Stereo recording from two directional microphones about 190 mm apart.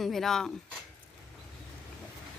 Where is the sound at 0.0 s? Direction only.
Centre (ahead or behind).